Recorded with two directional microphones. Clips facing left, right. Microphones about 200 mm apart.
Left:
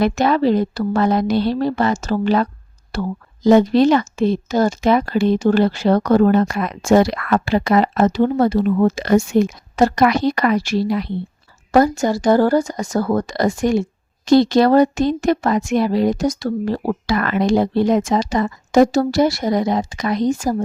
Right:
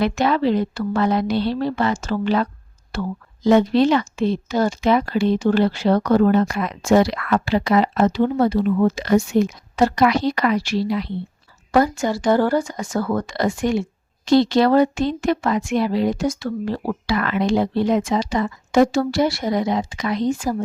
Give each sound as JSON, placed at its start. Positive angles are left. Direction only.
{"t": 0.0, "sound": "speech", "side_deg": 45}